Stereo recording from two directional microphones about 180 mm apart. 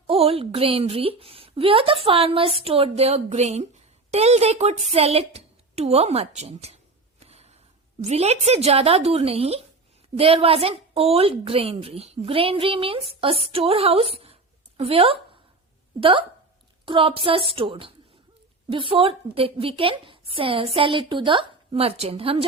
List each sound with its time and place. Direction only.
0.1 s a woman's voice: 35° right (ahead or behind)
7.2 s a sound: 35° right (ahead or behind)
8.0 s a woman's voice: 35° right (ahead or behind)